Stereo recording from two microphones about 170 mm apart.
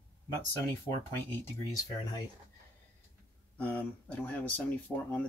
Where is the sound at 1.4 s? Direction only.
20° left (ahead or behind).